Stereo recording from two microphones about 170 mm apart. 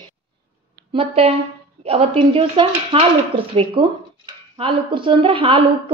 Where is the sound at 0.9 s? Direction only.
35° right (ahead or behind).